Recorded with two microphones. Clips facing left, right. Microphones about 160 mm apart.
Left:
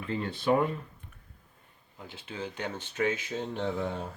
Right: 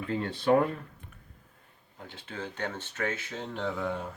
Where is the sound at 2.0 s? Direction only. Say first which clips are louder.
Left 1 dB; 10° left (ahead or behind).